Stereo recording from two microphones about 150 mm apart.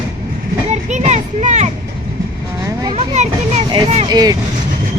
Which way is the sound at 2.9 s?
45° right (ahead or behind).